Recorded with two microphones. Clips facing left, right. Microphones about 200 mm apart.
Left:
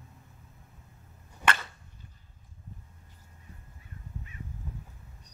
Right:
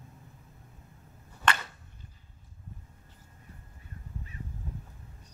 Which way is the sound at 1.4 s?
10° left (ahead or behind).